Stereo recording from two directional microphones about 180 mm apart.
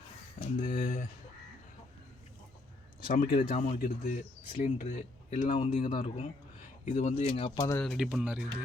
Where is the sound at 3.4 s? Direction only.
35° left (ahead or behind).